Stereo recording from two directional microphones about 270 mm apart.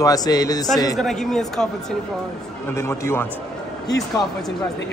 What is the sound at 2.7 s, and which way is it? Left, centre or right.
Speech, centre.